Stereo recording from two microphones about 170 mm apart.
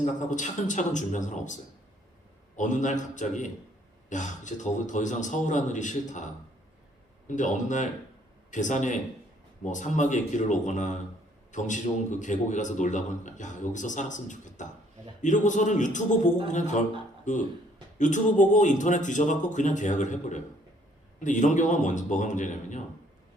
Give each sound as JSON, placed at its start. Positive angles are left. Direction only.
{"t": 0.0, "sound": "speech", "side_deg": 45}
{"t": 2.6, "sound": "speech", "side_deg": 45}